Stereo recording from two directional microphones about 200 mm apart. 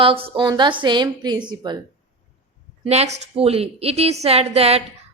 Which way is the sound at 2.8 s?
30° right (ahead or behind).